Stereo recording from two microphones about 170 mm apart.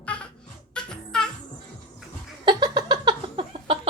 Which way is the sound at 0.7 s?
5° left (ahead or behind).